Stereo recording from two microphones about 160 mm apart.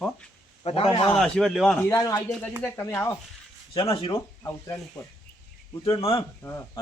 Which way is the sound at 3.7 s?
35° left (ahead or behind).